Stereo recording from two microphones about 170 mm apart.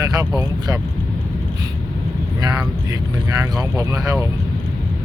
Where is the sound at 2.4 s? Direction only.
20° right (ahead or behind).